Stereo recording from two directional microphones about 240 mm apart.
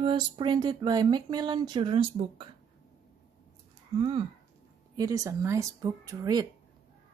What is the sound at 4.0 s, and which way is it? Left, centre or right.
Speech, right.